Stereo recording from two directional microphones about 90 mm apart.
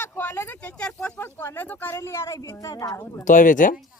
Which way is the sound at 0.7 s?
15° left (ahead or behind).